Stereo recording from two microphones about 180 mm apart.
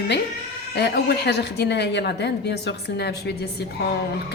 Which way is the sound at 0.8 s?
65° left (ahead or behind).